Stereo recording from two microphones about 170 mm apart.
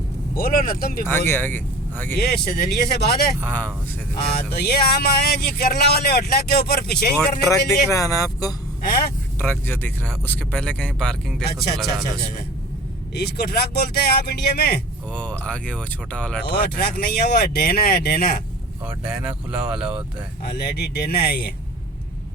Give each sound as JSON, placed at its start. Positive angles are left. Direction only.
{"t": 0.3, "sound": "speech", "side_deg": 60}
{"t": 1.3, "sound": "speech", "side_deg": 10}
{"t": 2.1, "sound": "speech", "side_deg": 65}
{"t": 3.4, "sound": "speech", "side_deg": 10}
{"t": 4.4, "sound": "speech", "side_deg": 65}
{"t": 7.7, "sound": "speech", "side_deg": 20}
{"t": 8.8, "sound": "speech", "side_deg": 65}
{"t": 9.4, "sound": "speech", "side_deg": 10}
{"t": 13.2, "sound": "speech", "side_deg": 70}
{"t": 15.1, "sound": "speech", "side_deg": 5}
{"t": 16.6, "sound": "speech", "side_deg": 65}
{"t": 18.9, "sound": "speech", "side_deg": -5}
{"t": 20.4, "sound": "speech", "side_deg": 65}